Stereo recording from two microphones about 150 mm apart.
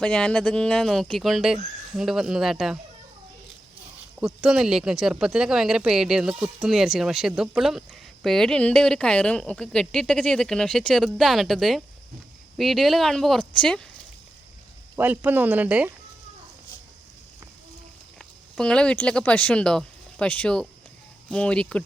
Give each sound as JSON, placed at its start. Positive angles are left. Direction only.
{"t": 0.0, "sound": "speech", "side_deg": 5}
{"t": 4.2, "sound": "speech", "side_deg": 0}
{"t": 14.9, "sound": "speech", "side_deg": -10}
{"t": 18.2, "sound": "speech", "side_deg": 5}